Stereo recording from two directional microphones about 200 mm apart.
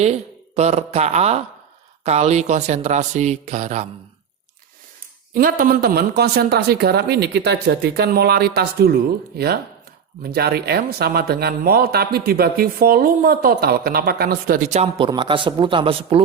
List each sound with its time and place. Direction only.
0.5 s speech: 35° right (ahead or behind)
5.3 s speech: 45° right (ahead or behind)
10.2 s speech: 50° right (ahead or behind); by 16.2 s 30° right (ahead or behind)